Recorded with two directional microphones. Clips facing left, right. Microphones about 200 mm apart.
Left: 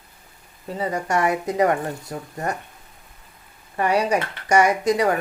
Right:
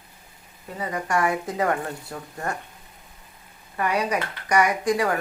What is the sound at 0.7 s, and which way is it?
Speech, 25° left (ahead or behind).